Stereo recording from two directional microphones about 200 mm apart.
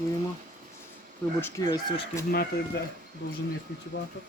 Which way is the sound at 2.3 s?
50° left (ahead or behind).